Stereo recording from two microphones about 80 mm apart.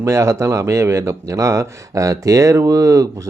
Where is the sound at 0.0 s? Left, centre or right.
Right.